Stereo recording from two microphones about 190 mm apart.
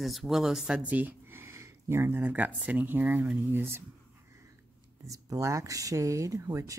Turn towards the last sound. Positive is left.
turn(degrees=-15)  # may be behind; listen again after turning